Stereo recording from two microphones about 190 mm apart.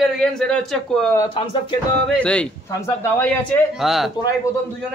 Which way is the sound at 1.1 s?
25° left (ahead or behind).